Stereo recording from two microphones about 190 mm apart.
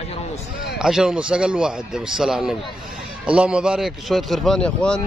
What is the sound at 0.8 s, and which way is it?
A man's voice, 5° right (ahead or behind).